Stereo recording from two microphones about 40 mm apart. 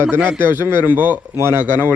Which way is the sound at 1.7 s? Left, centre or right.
Right.